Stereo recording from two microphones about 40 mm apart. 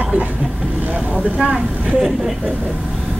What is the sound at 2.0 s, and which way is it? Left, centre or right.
Speech, centre.